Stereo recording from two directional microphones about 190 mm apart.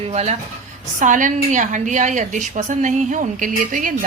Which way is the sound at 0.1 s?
35° right (ahead or behind).